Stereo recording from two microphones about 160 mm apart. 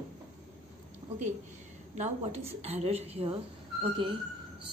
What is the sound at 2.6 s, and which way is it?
Speech, 40° right (ahead or behind).